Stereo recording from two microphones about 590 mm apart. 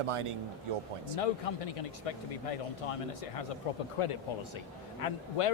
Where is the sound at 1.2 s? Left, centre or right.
Left.